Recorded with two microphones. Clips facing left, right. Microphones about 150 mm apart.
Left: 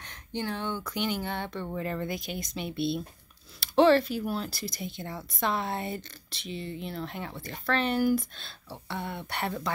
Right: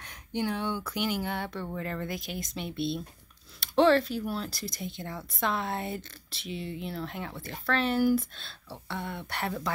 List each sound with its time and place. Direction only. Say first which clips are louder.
0.0 s speech: right 2 dB; 10° right (ahead or behind)
1.7 s speech: left 2 dB; 5° left (ahead or behind)